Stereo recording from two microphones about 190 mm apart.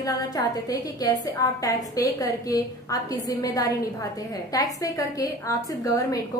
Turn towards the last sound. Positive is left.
turn(degrees=20)  # may be behind; listen again after turning